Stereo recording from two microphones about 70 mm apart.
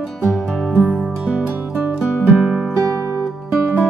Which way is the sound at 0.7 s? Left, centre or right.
Centre.